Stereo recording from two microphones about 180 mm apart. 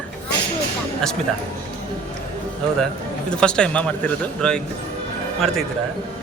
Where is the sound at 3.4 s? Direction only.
5° left (ahead or behind).